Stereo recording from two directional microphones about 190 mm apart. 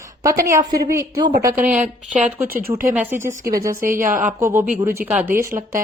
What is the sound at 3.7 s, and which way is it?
Speech, 45° right (ahead or behind).